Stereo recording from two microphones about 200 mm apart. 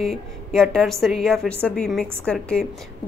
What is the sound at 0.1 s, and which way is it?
A woman's voice, centre (ahead or behind).